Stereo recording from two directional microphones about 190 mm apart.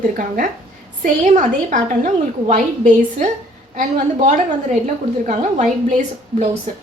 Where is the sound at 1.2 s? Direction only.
40° right (ahead or behind).